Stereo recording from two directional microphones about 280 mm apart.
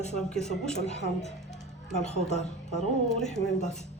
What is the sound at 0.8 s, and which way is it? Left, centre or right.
A woman's voice, left.